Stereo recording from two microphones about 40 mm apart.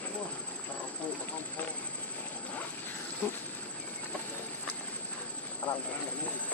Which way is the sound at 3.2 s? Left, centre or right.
Left.